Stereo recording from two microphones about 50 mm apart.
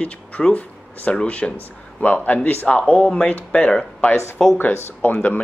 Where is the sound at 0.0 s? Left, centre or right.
Left.